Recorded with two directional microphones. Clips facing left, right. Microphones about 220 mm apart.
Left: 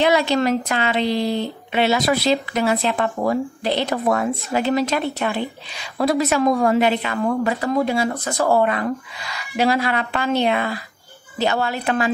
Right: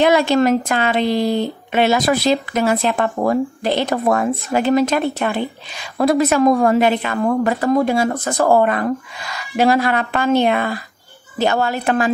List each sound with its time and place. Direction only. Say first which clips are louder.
0.0 s a woman's voice: right 4 dB; 50° right (ahead or behind)